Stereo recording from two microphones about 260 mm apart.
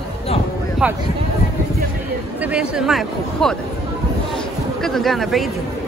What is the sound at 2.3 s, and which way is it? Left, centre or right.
Speech, centre.